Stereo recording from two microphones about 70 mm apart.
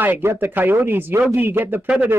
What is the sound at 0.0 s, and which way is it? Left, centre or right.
A woman's voice, right.